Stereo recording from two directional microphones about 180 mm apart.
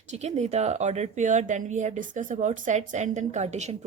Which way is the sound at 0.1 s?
40° right (ahead or behind).